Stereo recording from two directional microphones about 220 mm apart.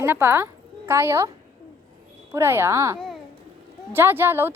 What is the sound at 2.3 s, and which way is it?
Speech, 10° right (ahead or behind).